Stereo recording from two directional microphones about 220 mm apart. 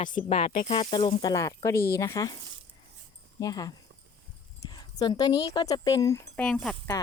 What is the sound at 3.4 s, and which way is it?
Speech, 15° left (ahead or behind).